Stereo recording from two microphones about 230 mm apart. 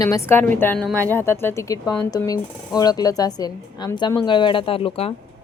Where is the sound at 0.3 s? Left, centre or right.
Centre.